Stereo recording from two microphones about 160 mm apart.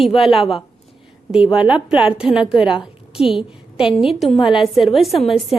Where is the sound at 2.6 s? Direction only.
30° left (ahead or behind).